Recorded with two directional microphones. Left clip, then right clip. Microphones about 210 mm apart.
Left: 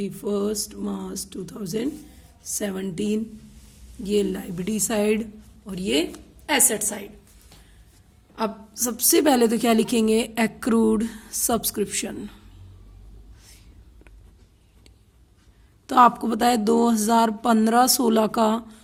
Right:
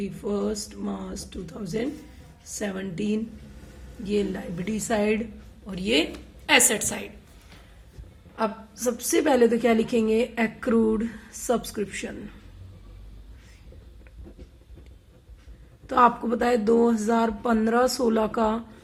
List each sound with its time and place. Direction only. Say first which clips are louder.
0.0 s speech: left 2 dB; 55° left (ahead or behind)
5.6 s a woman's voice: even; 40° left (ahead or behind)
8.4 s a woman's voice: left 1 dB; 50° left (ahead or behind); by 12.4 s 70° left (ahead or behind)
15.9 s mantra: left 3 dB; 65° left (ahead or behind)